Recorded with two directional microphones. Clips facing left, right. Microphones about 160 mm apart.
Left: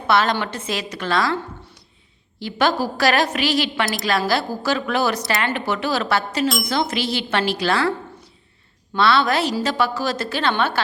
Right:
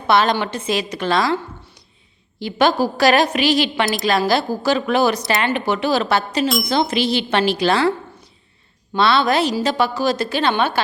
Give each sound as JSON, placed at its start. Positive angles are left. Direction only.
{"t": 0.1, "sound": "a woman's voice", "side_deg": -20}
{"t": 9.0, "sound": "a woman's voice", "side_deg": -20}